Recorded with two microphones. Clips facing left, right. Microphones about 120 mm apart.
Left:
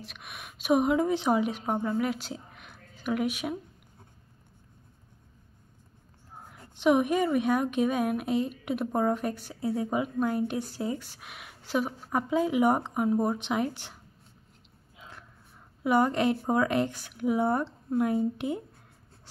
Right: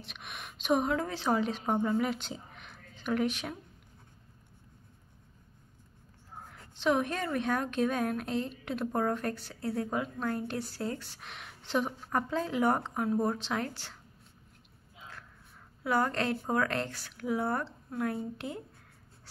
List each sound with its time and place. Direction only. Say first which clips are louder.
0.0 s a woman's voice: left 1 dB; centre (ahead or behind)
1.8 s speech: left 1 dB; centre (ahead or behind)
6.5 s a woman's voice: left 5 dB; 15° left (ahead or behind)
15.8 s a woman's voice: left 5 dB; 15° left (ahead or behind)